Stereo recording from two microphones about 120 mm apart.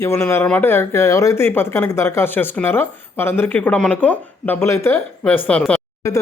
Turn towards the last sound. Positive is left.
turn(degrees=25)  # may be behind; listen again after turning